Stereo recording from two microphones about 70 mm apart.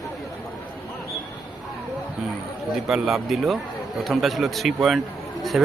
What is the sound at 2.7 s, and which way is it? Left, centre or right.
A man's voice, centre.